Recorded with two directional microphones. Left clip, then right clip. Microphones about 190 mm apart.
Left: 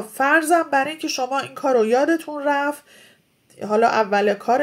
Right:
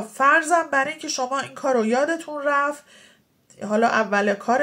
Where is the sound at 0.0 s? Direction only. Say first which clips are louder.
Even; 40° left (ahead or behind).